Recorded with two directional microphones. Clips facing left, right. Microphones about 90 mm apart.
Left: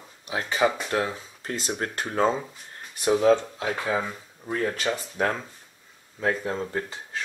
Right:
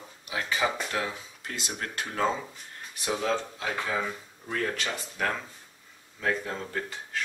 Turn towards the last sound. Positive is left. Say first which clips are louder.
# left 3 dB
turn(degrees=25)  # may be behind; listen again after turning